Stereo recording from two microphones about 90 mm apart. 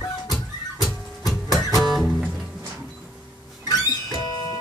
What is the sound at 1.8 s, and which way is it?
Music, centre (ahead or behind).